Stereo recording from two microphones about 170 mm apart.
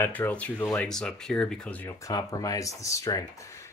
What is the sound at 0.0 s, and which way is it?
Speech, 10° left (ahead or behind).